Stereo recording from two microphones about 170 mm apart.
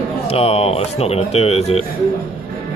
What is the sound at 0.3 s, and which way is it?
Speech, 35° left (ahead or behind).